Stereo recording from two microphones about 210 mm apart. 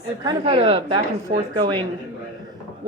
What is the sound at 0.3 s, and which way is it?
Speech, 25° right (ahead or behind).